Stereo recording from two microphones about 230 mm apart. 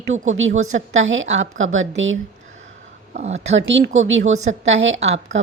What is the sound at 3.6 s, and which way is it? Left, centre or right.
Speech, right.